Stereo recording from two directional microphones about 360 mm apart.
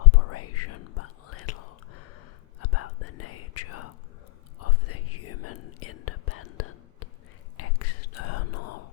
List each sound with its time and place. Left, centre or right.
0.1 s whispering: left